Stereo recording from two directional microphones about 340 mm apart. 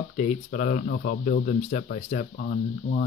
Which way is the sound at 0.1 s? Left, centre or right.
Left.